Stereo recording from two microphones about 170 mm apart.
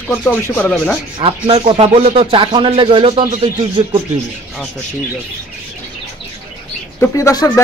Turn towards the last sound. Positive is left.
turn(degrees=15)  # may be behind; listen again after turning